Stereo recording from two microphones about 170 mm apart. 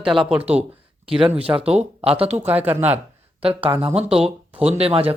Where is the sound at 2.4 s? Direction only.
10° right (ahead or behind).